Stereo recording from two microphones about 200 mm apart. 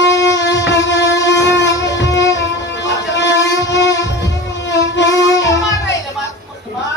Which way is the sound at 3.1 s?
60° left (ahead or behind).